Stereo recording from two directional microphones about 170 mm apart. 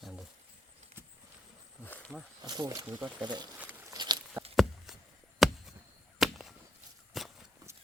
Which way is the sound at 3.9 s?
25° right (ahead or behind).